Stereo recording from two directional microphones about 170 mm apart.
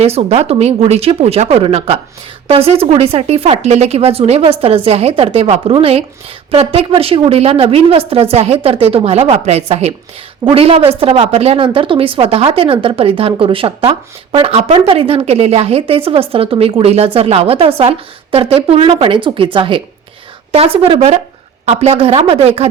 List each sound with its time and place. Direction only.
0.0 s a woman's voice: 35° right (ahead or behind)